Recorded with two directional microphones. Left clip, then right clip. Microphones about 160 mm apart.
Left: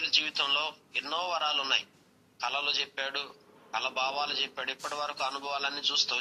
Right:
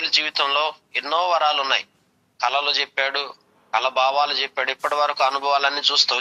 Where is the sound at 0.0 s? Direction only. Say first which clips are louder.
Right 8 dB; 45° right (ahead or behind).